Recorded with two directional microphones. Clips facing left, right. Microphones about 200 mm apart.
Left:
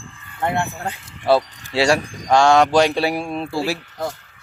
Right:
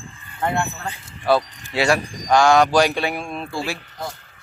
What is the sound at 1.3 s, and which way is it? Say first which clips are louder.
Speech: left 2 dB; 30° left (ahead or behind).